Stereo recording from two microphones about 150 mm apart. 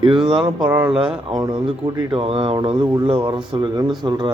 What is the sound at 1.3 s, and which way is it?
Speech, 30° right (ahead or behind).